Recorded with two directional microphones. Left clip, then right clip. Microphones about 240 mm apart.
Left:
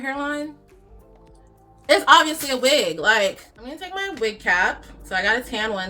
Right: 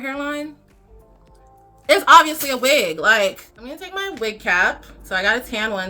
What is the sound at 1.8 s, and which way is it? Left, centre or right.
Speech, centre.